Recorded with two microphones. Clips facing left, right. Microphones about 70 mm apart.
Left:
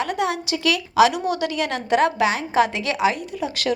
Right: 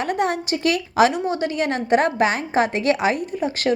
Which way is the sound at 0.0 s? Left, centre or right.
Right.